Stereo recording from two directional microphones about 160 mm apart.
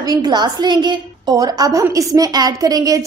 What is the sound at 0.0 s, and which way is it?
A woman's voice, 25° right (ahead or behind).